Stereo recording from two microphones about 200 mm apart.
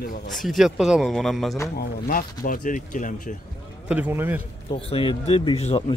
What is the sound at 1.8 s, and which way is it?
Speech, 45° left (ahead or behind).